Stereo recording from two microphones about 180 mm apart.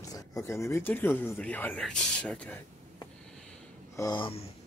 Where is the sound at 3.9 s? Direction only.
20° left (ahead or behind).